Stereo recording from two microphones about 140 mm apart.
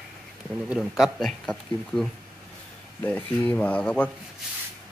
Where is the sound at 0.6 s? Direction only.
5° right (ahead or behind).